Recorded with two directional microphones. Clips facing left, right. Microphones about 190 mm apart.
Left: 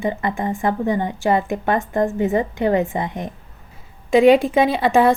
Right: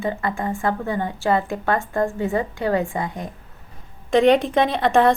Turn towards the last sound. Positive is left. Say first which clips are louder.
# left 2 dB
turn(degrees=5)  # may be behind; listen again after turning